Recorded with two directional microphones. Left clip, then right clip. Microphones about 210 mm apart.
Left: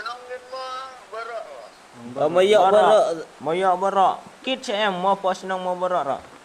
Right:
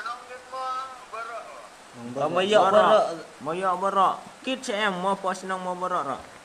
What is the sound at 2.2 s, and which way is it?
A man's voice, 30° left (ahead or behind).